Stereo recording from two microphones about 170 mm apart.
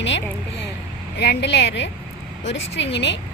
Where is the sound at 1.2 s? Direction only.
80° left.